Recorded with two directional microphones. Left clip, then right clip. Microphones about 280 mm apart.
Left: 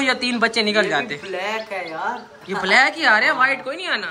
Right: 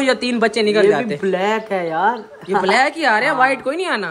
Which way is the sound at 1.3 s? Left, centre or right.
Right.